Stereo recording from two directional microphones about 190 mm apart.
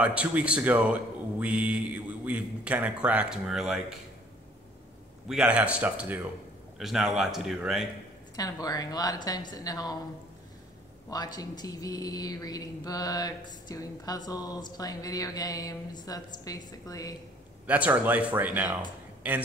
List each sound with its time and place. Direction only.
0.0 s speech: 10° right (ahead or behind)
5.3 s speech: 5° right (ahead or behind)
8.4 s speech: 20° left (ahead or behind)
11.1 s speech: 20° left (ahead or behind)
17.6 s speech: 10° right (ahead or behind)